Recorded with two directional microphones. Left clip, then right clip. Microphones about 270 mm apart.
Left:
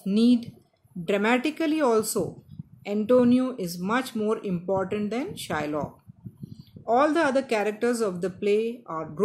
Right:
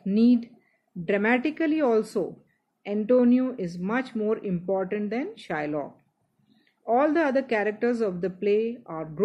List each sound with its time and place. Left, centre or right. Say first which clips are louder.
0.0 s speech: even; centre